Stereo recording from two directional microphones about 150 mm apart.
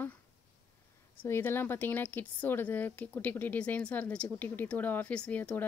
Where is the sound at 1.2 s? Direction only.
15° left (ahead or behind).